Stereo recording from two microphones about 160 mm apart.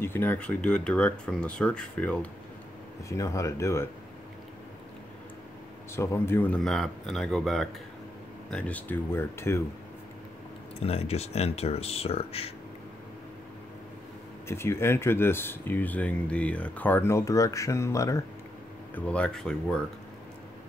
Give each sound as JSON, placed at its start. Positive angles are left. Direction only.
{"t": 0.0, "sound": "speech", "side_deg": 10}
{"t": 3.1, "sound": "speech", "side_deg": 20}
{"t": 5.9, "sound": "speech", "side_deg": 15}
{"t": 10.8, "sound": "speech", "side_deg": 40}
{"t": 14.5, "sound": "speech", "side_deg": 15}
{"t": 18.9, "sound": "speech", "side_deg": 5}